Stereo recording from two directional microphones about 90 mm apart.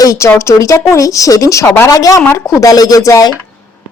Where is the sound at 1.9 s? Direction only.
45° left (ahead or behind).